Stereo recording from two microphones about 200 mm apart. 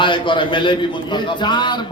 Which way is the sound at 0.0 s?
25° left (ahead or behind).